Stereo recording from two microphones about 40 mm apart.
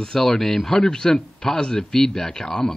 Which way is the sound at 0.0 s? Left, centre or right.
Centre.